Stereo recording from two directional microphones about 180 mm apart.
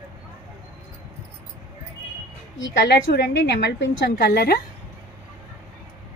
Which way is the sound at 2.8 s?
65° left (ahead or behind).